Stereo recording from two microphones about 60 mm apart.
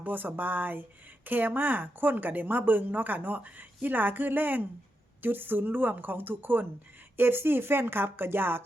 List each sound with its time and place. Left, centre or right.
0.0 s speech: right